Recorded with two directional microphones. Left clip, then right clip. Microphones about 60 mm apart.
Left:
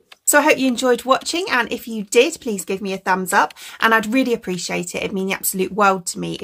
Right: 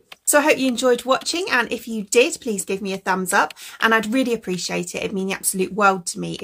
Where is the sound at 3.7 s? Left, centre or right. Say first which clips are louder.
Left 2 dB; left.